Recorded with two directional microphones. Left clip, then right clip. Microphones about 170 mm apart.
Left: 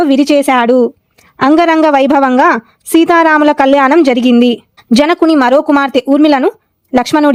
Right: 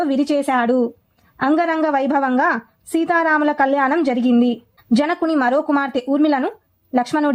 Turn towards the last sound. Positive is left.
turn(degrees=45)  # may be behind; listen again after turning